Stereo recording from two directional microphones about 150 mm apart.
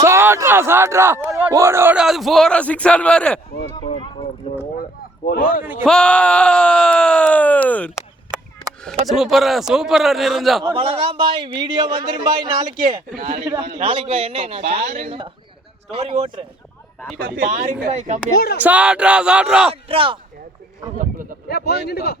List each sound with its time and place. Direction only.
0.0 s speech: 15° right (ahead or behind); by 3.4 s 5° left (ahead or behind)
4.4 s speech: 35° left (ahead or behind)
4.8 s speech: 70° left (ahead or behind)
5.8 s a sound: 5° left (ahead or behind)
9.0 s a man's voice: centre (ahead or behind)
10.8 s a man's voice: 40° right (ahead or behind)
13.6 s a man's voice: 40° right (ahead or behind)
17.2 s speech: 75° right (ahead or behind)
17.5 s speech: 50° right (ahead or behind)
18.6 s speech: 10° right (ahead or behind)
19.7 s a man's voice: 35° right (ahead or behind)
21.0 s speech: 65° right (ahead or behind)
21.5 s speech: 90° left